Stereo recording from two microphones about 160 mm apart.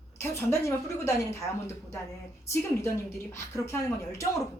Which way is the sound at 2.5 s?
15° left (ahead or behind).